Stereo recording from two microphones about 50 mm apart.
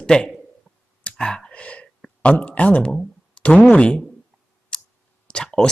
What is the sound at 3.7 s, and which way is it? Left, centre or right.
Speech, left.